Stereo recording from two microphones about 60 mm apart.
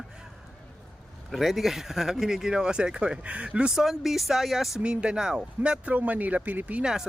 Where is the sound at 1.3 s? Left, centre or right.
Centre.